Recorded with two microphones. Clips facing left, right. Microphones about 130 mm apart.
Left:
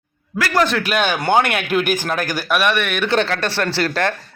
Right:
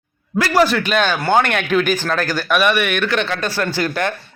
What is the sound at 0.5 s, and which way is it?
A man's voice, 5° right (ahead or behind).